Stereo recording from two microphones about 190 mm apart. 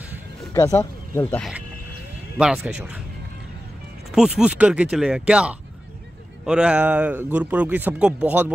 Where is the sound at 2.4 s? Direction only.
5° right (ahead or behind).